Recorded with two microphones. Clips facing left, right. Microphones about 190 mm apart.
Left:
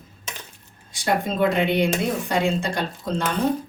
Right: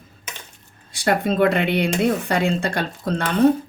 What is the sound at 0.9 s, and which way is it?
Speech, 65° right (ahead or behind).